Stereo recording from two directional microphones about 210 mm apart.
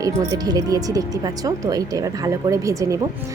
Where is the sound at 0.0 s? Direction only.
15° right (ahead or behind).